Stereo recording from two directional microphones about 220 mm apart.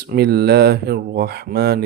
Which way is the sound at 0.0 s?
45° right (ahead or behind).